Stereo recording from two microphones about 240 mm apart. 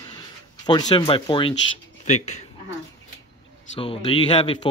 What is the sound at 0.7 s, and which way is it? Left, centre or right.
Speech, centre.